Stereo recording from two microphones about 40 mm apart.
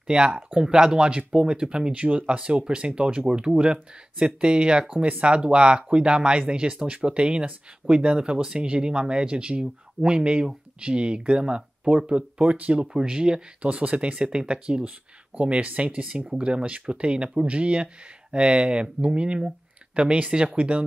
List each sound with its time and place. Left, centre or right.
0.0 s speech: right
13.6 s speech: right